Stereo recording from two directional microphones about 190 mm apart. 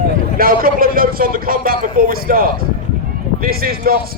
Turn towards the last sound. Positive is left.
turn(degrees=-50)  # may be behind; listen again after turning